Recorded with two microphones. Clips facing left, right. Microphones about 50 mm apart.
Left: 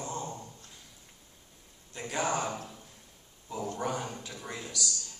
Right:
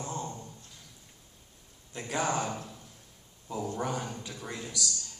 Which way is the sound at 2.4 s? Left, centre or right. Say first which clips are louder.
Even; centre.